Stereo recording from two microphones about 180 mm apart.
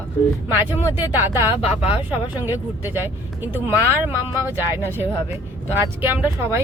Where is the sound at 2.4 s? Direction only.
10° right (ahead or behind).